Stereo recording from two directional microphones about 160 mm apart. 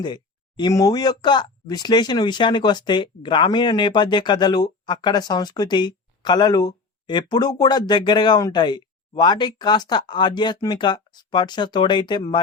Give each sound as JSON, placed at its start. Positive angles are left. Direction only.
{"t": 0.0, "sound": "speech", "side_deg": 25}